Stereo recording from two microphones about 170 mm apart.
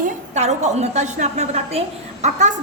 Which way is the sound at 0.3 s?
40° right (ahead or behind).